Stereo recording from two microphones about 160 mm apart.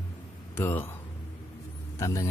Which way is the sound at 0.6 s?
15° left (ahead or behind).